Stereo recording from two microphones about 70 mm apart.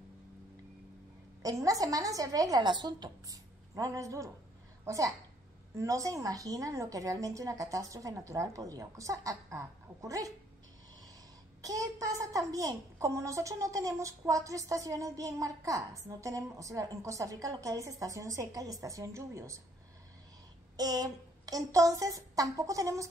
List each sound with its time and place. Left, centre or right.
1.4 s speech: right
3.3 s a woman's voice: right
11.6 s a woman's voice: right
20.7 s speech: right